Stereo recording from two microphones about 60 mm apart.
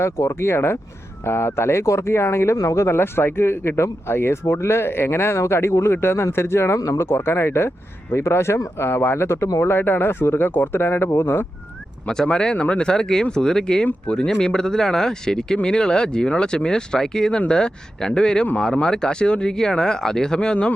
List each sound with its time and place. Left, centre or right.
0.0 s speech: left
0.4 s speech: left
6.7 s speech: left
7.0 s speech: left
12.0 s speech: centre